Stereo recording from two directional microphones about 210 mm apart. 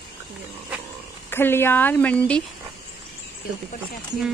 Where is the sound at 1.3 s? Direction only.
10° left (ahead or behind).